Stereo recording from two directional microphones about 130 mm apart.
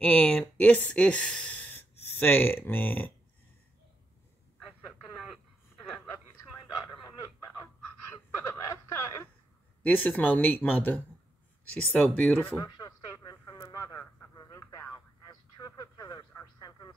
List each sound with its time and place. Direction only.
0.0 s speech: 10° left (ahead or behind)
4.6 s radio: 5° right (ahead or behind)
8.5 s a sound: 20° left (ahead or behind)
9.8 s speech: 10° left (ahead or behind)
12.5 s radio: 30° left (ahead or behind)
15.2 s a sound: 30° left (ahead or behind)